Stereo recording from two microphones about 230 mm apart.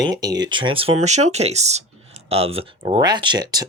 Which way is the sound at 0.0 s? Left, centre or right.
Centre.